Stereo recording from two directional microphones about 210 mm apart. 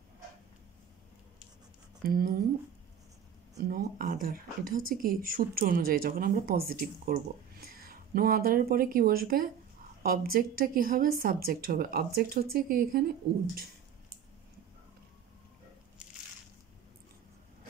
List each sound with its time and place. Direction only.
2.0 s speech: 45° right (ahead or behind)
3.5 s speech: 40° right (ahead or behind)